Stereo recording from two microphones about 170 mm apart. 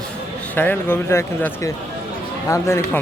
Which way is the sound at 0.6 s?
10° left (ahead or behind).